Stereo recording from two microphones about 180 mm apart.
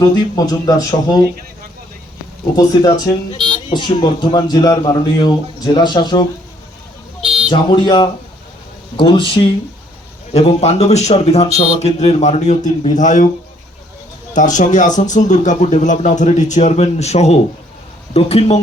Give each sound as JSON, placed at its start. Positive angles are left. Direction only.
{"t": 0.0, "sound": "speech", "side_deg": 20}
{"t": 2.6, "sound": "speech", "side_deg": 20}
{"t": 7.5, "sound": "speech", "side_deg": 25}
{"t": 14.3, "sound": "speech", "side_deg": 45}